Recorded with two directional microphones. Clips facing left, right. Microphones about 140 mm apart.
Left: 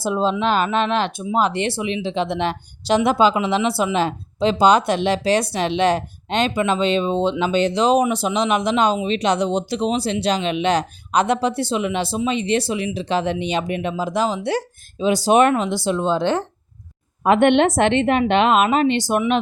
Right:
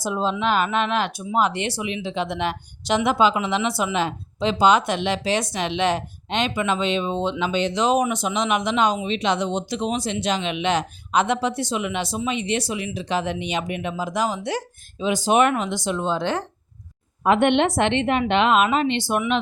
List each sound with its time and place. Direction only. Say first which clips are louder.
0.0 s speech: left 3 dB; 30° left (ahead or behind)
17.2 s a woman's voice: left 3 dB; 50° left (ahead or behind)